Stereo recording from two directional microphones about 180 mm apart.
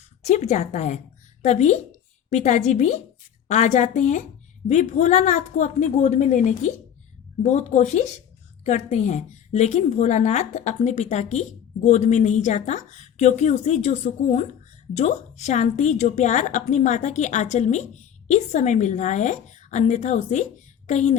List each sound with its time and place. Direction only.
0.2 s a woman's voice: 40° left (ahead or behind)